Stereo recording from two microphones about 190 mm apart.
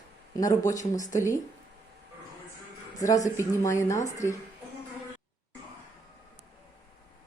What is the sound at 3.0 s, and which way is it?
Speech, 15° left (ahead or behind).